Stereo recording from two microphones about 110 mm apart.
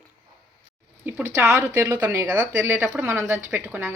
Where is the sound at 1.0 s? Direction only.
20° right (ahead or behind).